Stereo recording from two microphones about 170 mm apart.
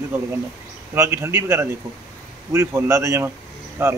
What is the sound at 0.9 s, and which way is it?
A man's voice, 15° right (ahead or behind).